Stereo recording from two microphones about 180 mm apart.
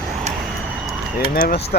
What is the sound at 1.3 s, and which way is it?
Speech, 55° left (ahead or behind).